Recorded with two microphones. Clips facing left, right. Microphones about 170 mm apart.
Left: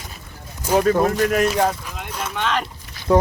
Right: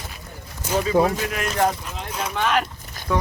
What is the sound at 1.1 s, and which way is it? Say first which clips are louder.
Speech: left 8 dB; 45° left (ahead or behind).